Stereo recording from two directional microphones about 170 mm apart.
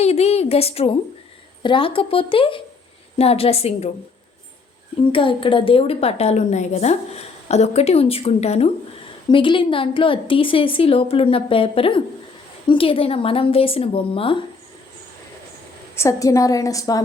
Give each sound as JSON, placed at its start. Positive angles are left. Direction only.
{"t": 0.0, "sound": "a woman's voice", "side_deg": 40}
{"t": 5.1, "sound": "a woman's voice", "side_deg": 30}
{"t": 16.0, "sound": "a woman's voice", "side_deg": 20}